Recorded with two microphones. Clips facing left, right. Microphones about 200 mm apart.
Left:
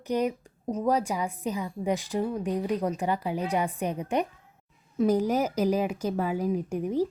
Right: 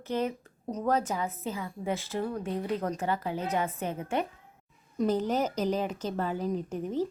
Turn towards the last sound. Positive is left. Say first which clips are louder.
# left 4 dB
turn(degrees=10)  # may be behind; listen again after turning